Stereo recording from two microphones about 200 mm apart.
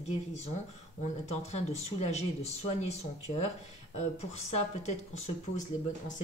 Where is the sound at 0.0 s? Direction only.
35° left (ahead or behind).